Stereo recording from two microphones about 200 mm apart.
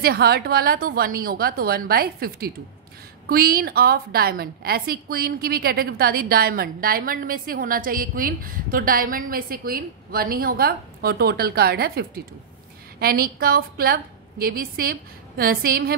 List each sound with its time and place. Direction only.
0.0 s a woman's voice: 50° right (ahead or behind)